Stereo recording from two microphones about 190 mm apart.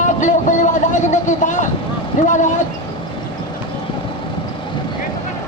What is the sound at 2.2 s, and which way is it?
Speech, 40° left (ahead or behind).